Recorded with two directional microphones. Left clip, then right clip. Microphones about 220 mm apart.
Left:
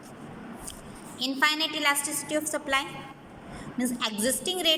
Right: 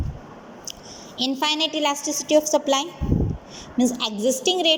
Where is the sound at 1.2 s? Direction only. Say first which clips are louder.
Right 3 dB; 15° right (ahead or behind).